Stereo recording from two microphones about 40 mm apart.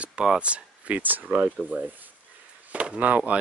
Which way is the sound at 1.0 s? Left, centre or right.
Right.